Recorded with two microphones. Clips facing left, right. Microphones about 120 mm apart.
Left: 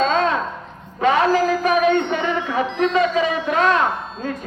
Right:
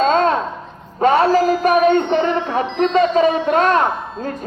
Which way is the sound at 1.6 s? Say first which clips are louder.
Right 3 dB; 45° right (ahead or behind).